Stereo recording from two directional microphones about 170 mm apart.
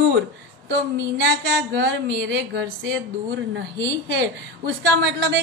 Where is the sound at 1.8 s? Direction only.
90° right.